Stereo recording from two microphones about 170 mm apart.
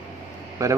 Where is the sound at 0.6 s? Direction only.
20° right (ahead or behind).